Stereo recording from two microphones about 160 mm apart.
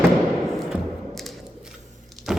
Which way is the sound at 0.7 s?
Centre (ahead or behind).